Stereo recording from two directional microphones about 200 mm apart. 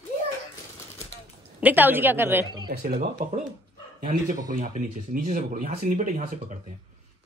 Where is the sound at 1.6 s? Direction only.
10° right (ahead or behind).